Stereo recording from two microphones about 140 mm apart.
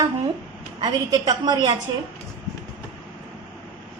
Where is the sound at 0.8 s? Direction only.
30° right (ahead or behind).